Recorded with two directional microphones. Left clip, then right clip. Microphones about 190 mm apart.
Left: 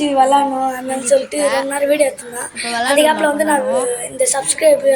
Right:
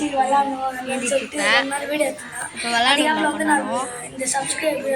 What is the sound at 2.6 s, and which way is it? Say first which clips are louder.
A woman's voice: left 4 dB; 20° left (ahead or behind).